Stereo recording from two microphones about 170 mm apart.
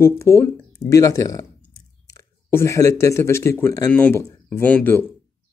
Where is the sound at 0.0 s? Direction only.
15° left (ahead or behind).